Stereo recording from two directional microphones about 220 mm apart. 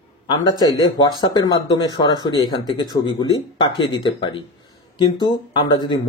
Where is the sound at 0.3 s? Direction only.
20° left (ahead or behind).